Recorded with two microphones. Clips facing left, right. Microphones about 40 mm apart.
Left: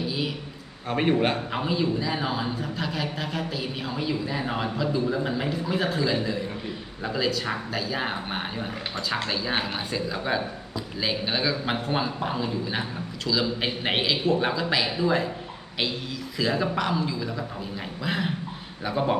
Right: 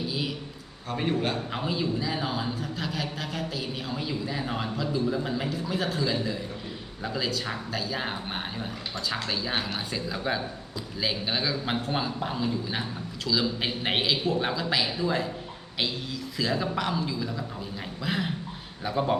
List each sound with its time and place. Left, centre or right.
0.0 s a sound: centre
0.9 s a man's voice: left
1.5 s a man's voice: centre
16.4 s a man's voice: centre